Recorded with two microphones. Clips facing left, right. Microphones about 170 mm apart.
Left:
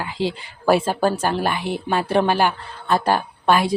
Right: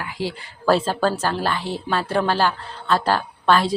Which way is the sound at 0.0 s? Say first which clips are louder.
Left 3 dB; 25° left (ahead or behind).